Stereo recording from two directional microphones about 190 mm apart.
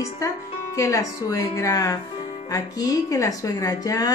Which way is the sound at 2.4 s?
20° left (ahead or behind).